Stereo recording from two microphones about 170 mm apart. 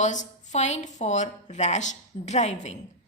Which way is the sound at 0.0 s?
45° left (ahead or behind).